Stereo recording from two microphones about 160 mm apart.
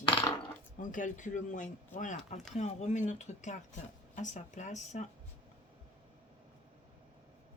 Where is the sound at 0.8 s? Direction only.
55° left (ahead or behind).